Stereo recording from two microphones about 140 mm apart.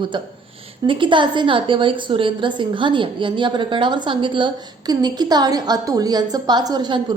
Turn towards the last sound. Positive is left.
turn(degrees=-30)  # may be behind; listen again after turning